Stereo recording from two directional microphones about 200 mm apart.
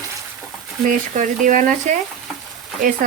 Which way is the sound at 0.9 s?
40° right (ahead or behind).